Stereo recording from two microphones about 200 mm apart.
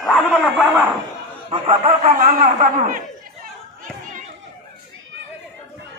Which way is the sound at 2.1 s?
45° right (ahead or behind).